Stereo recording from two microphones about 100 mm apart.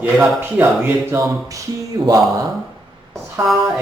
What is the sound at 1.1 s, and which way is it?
Speech, 30° right (ahead or behind).